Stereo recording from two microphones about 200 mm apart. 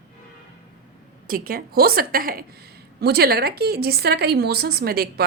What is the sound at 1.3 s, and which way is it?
A woman's voice, 45° right (ahead or behind).